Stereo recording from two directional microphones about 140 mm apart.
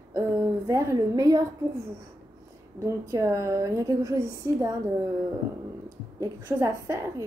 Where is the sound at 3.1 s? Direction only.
20° right (ahead or behind).